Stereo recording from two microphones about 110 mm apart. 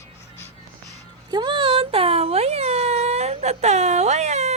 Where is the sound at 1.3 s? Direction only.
45° right (ahead or behind).